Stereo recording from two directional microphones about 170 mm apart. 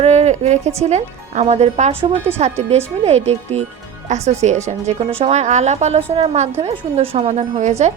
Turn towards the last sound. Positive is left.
turn(degrees=-40)  # may be behind; listen again after turning